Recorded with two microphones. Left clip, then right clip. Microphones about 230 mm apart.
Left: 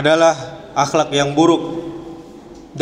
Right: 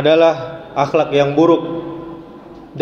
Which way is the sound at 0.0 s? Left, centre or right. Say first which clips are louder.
Right 1 dB; left.